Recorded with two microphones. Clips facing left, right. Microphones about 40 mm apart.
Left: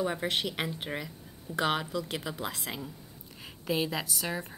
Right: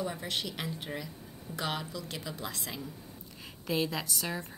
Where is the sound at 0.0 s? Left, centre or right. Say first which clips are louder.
Left 5 dB; left.